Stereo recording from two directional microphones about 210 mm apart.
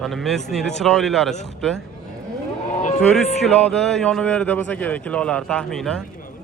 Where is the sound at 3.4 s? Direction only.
Centre (ahead or behind).